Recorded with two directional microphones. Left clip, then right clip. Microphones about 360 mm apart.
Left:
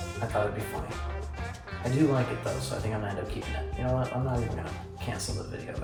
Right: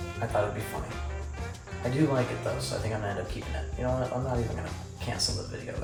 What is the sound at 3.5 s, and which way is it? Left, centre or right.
Speech, centre.